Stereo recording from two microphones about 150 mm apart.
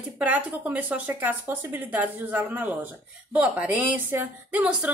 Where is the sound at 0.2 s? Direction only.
10° right (ahead or behind).